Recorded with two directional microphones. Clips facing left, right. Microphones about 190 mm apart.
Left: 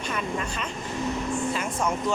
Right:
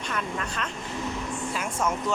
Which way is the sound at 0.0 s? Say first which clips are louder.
Left 2 dB; 5° left (ahead or behind).